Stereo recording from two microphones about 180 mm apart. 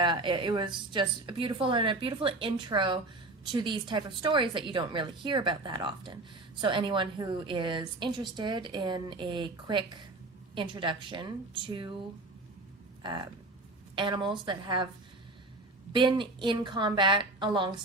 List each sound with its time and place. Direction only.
0.0 s a woman's voice: 25° right (ahead or behind)
13.0 s a woman's voice: 25° right (ahead or behind)
15.9 s a woman's voice: 25° right (ahead or behind)